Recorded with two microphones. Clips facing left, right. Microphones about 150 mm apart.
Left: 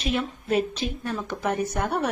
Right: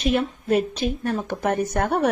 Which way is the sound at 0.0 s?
50° right (ahead or behind).